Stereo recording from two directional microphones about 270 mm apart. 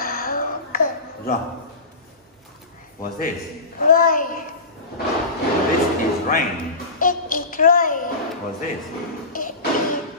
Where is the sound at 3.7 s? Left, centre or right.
Left.